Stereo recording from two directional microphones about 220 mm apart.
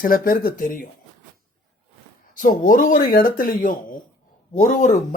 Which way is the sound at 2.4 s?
40° left (ahead or behind).